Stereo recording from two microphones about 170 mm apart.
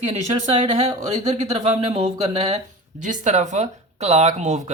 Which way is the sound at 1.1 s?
40° right (ahead or behind).